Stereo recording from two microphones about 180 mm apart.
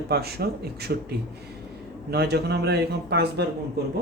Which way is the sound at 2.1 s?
65° right (ahead or behind).